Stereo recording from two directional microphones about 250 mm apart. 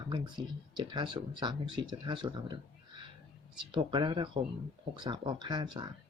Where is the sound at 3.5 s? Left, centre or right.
Centre.